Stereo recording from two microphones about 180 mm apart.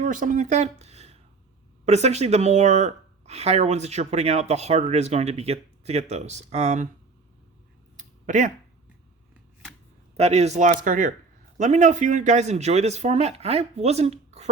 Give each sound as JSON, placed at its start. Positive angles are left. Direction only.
{"t": 0.0, "sound": "speech", "side_deg": -45}
{"t": 7.9, "sound": "a sound", "side_deg": -45}
{"t": 10.2, "sound": "speech", "side_deg": -35}